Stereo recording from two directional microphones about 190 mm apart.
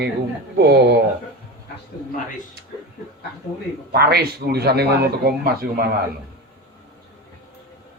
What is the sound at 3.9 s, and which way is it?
A man's voice, 55° right (ahead or behind).